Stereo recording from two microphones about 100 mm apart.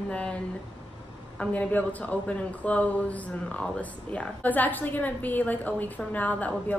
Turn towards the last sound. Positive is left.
turn(degrees=15)  # may be behind; listen again after turning